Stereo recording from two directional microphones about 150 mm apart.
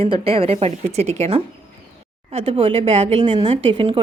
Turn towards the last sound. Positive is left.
turn(degrees=-40)  # may be behind; listen again after turning